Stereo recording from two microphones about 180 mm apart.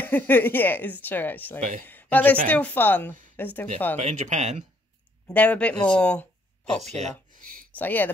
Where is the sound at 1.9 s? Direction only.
10° left (ahead or behind).